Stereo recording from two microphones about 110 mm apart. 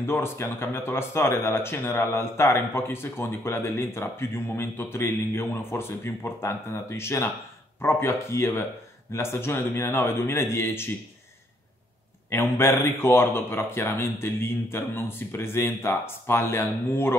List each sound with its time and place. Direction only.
0.0 s speech: 20° left (ahead or behind)
12.3 s speech: 25° left (ahead or behind)